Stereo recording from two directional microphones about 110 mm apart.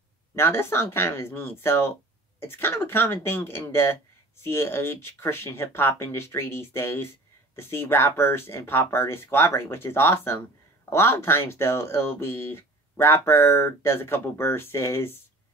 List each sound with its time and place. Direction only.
0.4 s speech: 20° left (ahead or behind)